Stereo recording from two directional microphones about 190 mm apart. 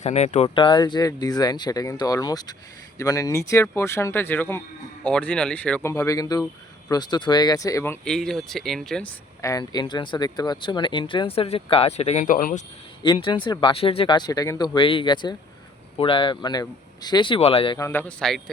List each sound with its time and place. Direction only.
0.0 s speech: 35° left (ahead or behind); by 7.9 s 15° left (ahead or behind)
8.0 s speech: 5° left (ahead or behind); by 12.6 s 45° left (ahead or behind)
13.0 s speech: 25° left (ahead or behind)
17.7 s speech: 10° left (ahead or behind)